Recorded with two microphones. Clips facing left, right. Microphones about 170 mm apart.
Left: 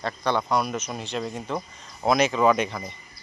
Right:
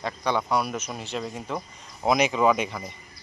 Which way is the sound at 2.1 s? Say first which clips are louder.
Left 1 dB; 15° right (ahead or behind).